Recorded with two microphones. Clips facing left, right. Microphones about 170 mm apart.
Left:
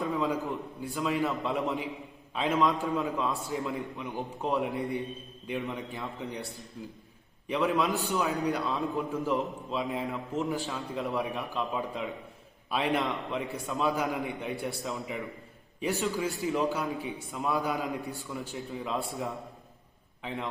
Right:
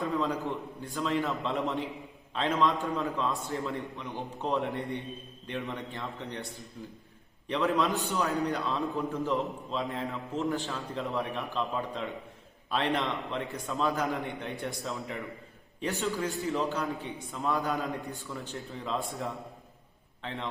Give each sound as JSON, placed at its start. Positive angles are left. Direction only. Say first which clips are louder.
{"t": 0.0, "sound": "a man's voice", "louder": "left 1 dB", "side_deg": 0}
{"t": 20.2, "sound": "a man's voice", "louder": "left 1 dB", "side_deg": 0}